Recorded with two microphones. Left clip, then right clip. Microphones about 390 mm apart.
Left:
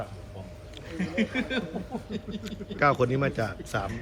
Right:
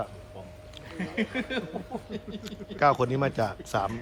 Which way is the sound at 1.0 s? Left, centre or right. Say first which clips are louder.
Left 2 dB; right.